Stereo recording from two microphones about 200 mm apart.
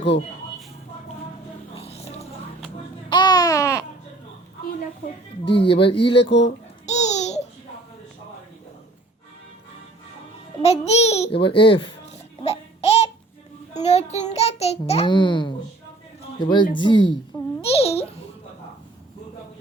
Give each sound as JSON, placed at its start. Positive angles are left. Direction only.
{"t": 1.8, "sound": "a sound", "side_deg": 30}
{"t": 3.1, "sound": "babbling", "side_deg": 20}
{"t": 5.5, "sound": "speech", "side_deg": 25}
{"t": 6.8, "sound": "babbling", "side_deg": 35}
{"t": 10.6, "sound": "babbling", "side_deg": 30}
{"t": 13.7, "sound": "a sound", "side_deg": 35}
{"t": 16.4, "sound": "speech", "side_deg": 25}
{"t": 17.6, "sound": "babbling", "side_deg": 30}